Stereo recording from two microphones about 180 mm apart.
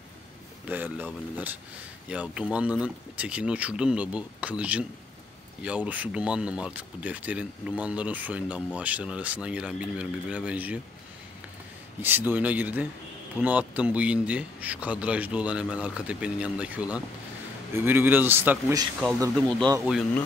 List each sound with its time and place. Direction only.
0.7 s a man's voice: 10° right (ahead or behind)
12.0 s a man's voice: 10° right (ahead or behind)
19.8 s speech: centre (ahead or behind)